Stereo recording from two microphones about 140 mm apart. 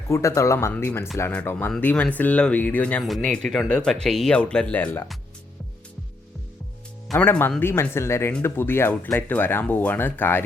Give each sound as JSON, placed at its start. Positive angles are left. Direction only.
{"t": 0.1, "sound": "speech", "side_deg": 20}
{"t": 7.2, "sound": "speech", "side_deg": 15}